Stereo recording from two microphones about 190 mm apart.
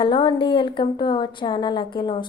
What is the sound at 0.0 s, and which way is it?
A woman's voice, 25° left (ahead or behind).